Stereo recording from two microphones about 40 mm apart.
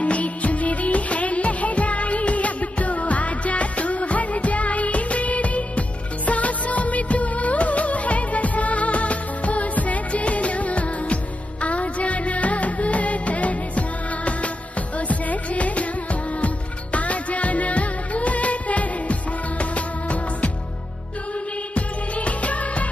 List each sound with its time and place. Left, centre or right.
0.0 s music of bollywood: left
11.6 s music: left
21.7 s music: left